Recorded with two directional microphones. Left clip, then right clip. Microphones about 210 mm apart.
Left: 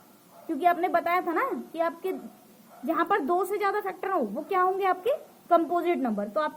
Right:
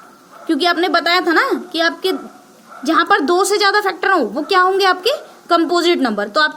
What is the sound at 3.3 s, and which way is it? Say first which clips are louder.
Speech: right 12 dB; 35° right (ahead or behind).